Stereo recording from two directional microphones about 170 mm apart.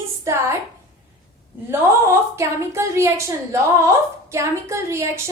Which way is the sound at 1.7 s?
15° right (ahead or behind).